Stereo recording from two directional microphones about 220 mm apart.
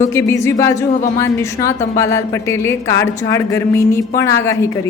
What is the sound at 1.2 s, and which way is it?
Speech, 15° left (ahead or behind).